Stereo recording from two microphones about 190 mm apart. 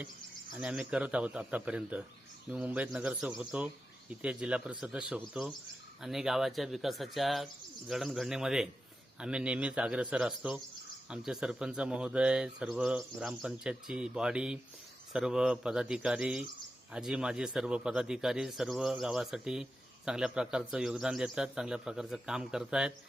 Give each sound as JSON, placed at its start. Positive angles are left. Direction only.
{"t": 0.5, "sound": "a man's voice", "side_deg": -5}